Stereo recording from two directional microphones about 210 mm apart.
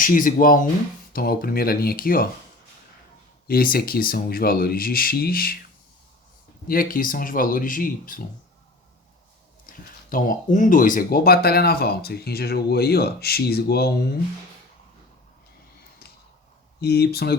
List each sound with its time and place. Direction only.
0.0 s speech: 40° left (ahead or behind)
3.4 s speech: 45° left (ahead or behind)
6.7 s speech: 40° left (ahead or behind)
9.6 s speech: 40° left (ahead or behind)
16.8 s speech: 50° left (ahead or behind)